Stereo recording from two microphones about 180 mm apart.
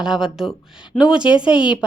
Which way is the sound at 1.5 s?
25° left (ahead or behind).